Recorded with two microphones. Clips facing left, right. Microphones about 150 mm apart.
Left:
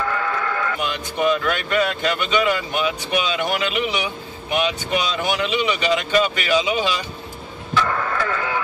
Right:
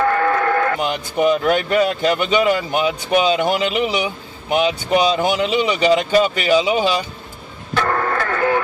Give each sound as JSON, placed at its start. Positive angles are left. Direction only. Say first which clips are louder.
{"t": 0.0, "sound": "radio", "louder": "right 7 dB", "side_deg": -55}
{"t": 1.3, "sound": "speech", "louder": "right 5 dB", "side_deg": -35}
{"t": 7.7, "sound": "radio", "louder": "right 3 dB", "side_deg": -50}